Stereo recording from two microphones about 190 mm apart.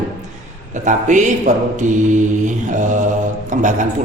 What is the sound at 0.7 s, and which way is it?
A man's voice, 40° right (ahead or behind).